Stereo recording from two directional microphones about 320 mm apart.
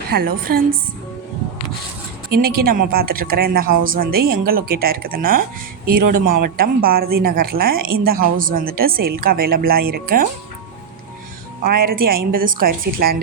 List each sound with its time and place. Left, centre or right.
0.1 s speech: right
2.3 s a woman's voice: right
2.6 s speech: right
11.6 s speech: right